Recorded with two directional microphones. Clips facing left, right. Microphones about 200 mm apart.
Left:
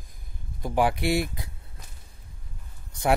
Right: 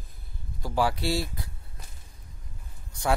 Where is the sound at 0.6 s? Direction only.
20° left (ahead or behind).